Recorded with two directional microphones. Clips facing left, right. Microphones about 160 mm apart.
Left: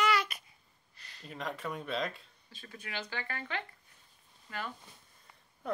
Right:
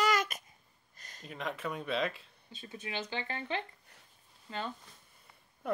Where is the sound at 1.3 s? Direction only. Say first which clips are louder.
Right 1 dB; centre (ahead or behind).